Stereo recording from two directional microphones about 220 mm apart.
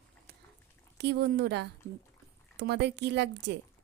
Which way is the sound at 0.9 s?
50° right (ahead or behind).